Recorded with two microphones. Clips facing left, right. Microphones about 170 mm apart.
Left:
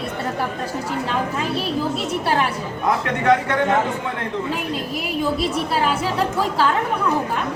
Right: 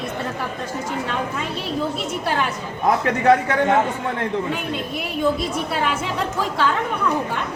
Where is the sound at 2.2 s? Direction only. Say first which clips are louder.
Left 2 dB; 30° left (ahead or behind).